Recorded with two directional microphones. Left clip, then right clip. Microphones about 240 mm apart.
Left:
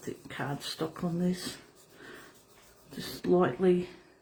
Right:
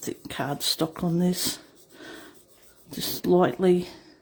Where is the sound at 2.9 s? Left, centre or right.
Right.